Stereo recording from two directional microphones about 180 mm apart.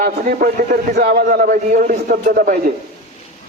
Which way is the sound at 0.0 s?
50° right (ahead or behind).